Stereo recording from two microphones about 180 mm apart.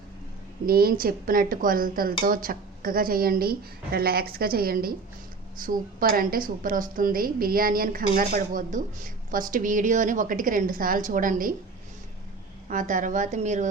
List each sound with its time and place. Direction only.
0.6 s a woman's voice: 55° right (ahead or behind)
12.6 s a woman's voice: 45° right (ahead or behind)